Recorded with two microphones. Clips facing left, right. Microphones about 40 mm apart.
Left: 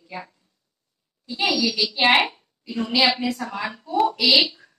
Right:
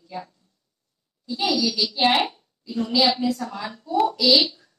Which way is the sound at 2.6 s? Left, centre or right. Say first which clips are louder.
Even; left.